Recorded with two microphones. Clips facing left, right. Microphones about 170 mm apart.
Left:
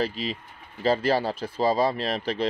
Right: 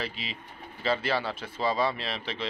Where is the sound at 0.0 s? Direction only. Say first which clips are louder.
Left 8 dB; 40° left (ahead or behind).